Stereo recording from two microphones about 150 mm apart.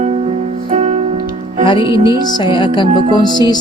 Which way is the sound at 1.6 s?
30° left (ahead or behind).